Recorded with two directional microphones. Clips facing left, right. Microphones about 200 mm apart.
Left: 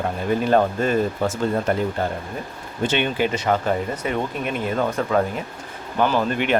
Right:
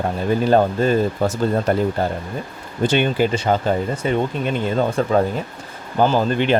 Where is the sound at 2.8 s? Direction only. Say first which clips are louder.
Right 4 dB; 40° right (ahead or behind).